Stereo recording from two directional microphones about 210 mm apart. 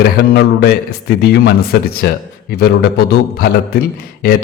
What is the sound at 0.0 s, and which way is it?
A man's voice, 50° left (ahead or behind).